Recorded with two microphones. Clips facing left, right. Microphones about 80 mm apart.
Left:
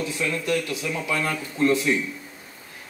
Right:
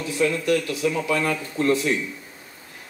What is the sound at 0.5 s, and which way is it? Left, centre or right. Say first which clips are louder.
Speech: right 3 dB; left.